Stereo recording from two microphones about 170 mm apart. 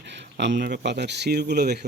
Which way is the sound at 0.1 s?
90° right.